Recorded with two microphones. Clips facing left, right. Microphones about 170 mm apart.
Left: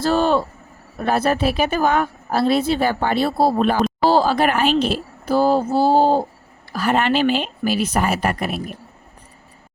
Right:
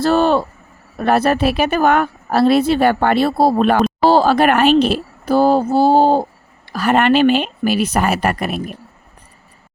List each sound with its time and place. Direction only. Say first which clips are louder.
0.0 s speech: right 3 dB; 60° right (ahead or behind)